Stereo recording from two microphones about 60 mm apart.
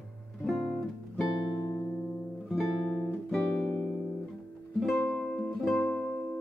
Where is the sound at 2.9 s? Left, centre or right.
Centre.